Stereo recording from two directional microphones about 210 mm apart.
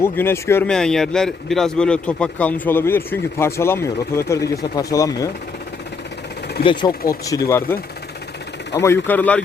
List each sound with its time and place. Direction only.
0.0 s speech: 10° left (ahead or behind)
6.6 s speech: 25° left (ahead or behind); by 9.4 s 10° left (ahead or behind)